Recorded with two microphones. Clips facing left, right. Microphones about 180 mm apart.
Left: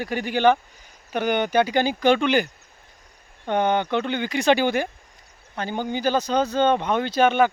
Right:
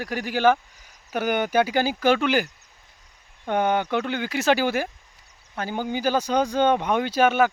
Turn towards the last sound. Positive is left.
turn(degrees=-5)  # may be behind; listen again after turning